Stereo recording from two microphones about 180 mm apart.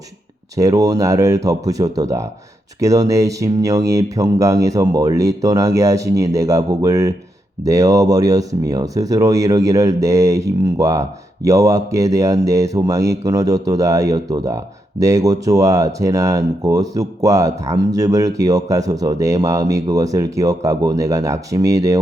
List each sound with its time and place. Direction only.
0.5 s speech: 20° right (ahead or behind)